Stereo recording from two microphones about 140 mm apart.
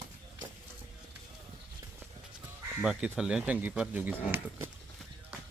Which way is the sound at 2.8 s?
10° right (ahead or behind).